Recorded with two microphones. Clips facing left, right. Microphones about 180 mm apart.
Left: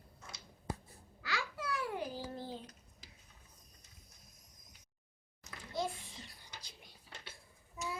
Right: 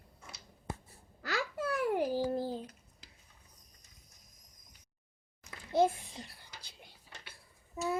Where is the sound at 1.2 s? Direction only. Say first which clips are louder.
Right 5 dB; 50° right (ahead or behind).